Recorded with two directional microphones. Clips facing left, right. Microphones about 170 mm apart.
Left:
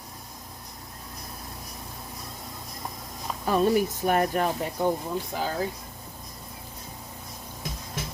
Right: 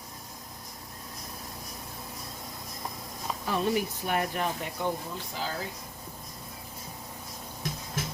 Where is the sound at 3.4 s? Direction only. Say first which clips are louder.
Left 6 dB; 45° left (ahead or behind).